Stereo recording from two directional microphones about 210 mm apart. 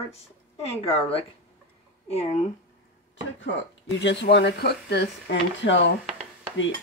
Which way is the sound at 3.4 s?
60° left (ahead or behind).